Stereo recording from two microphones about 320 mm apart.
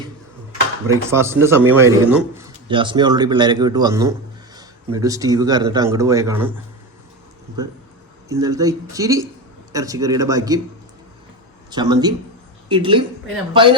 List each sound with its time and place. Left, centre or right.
0.9 s a man's voice: centre
8.3 s a man's voice: centre
11.7 s a man's voice: centre